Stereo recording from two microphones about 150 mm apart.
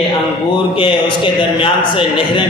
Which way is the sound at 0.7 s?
35° left (ahead or behind).